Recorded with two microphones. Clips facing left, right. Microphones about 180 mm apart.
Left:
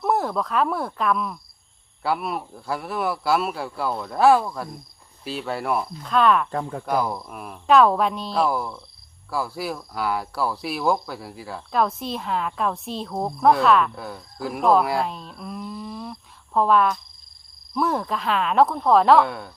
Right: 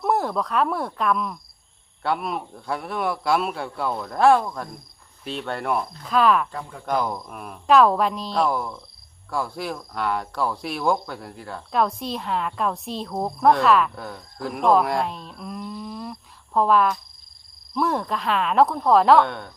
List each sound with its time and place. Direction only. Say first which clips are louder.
0.0 s speech: even; centre (ahead or behind)
6.5 s speech: left 7 dB; 50° left (ahead or behind)
6.8 s speech: right 2 dB; 10° left (ahead or behind)